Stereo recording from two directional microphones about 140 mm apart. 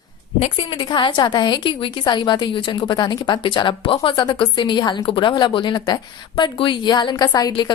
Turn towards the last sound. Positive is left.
turn(degrees=30)  # may be behind; listen again after turning